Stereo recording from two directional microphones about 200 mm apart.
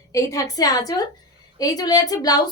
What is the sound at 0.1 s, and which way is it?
A woman's voice, 15° left (ahead or behind).